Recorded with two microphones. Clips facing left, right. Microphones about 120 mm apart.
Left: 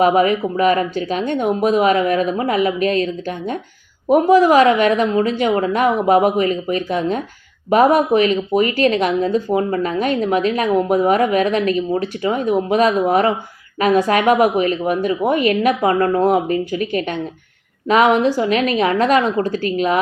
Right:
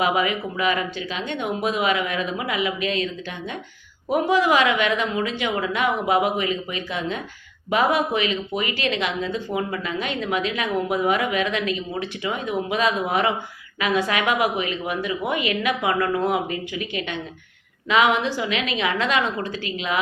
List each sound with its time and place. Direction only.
0.0 s speech: 40° left (ahead or behind)